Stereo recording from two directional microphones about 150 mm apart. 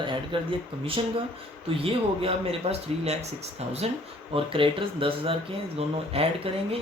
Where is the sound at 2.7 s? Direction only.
45° right (ahead or behind).